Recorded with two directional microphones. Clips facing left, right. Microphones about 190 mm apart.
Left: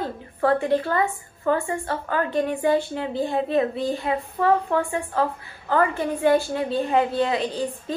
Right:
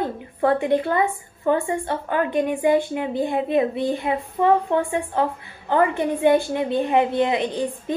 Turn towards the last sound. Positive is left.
turn(degrees=-20)  # may be behind; listen again after turning